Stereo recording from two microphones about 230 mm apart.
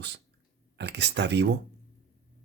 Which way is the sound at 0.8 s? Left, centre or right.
Right.